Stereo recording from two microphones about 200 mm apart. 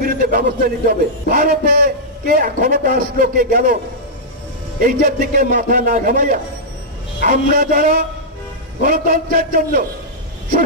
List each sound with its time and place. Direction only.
0.0 s a man's voice: 45° right (ahead or behind)
4.7 s a man's voice: 45° right (ahead or behind)